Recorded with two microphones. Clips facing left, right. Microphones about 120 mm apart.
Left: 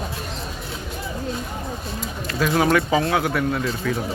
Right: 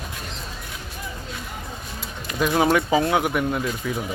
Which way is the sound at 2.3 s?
20° right (ahead or behind).